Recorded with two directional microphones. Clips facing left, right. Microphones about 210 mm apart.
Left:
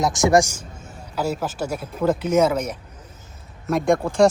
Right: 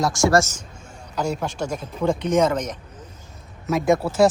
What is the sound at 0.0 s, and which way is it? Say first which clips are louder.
Speech: left 1 dB; 20° left (ahead or behind).